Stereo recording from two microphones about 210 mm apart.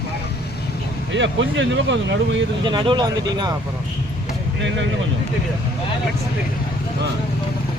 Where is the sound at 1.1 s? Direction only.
60° right (ahead or behind).